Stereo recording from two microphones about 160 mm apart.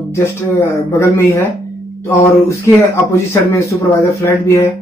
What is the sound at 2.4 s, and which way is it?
Speech, 15° left (ahead or behind).